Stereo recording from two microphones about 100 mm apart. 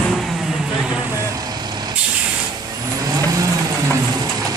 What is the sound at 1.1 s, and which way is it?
Vehicle, 30° right (ahead or behind).